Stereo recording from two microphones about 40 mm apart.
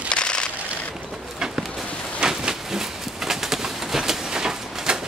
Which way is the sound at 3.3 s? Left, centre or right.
Centre.